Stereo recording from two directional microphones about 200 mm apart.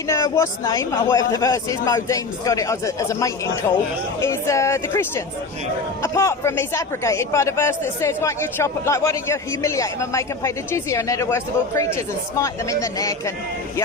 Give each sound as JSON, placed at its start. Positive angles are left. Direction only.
{"t": 0.1, "sound": "speech", "side_deg": 15}